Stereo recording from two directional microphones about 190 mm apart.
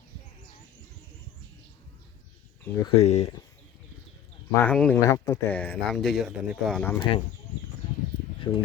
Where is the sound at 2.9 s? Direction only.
35° left (ahead or behind).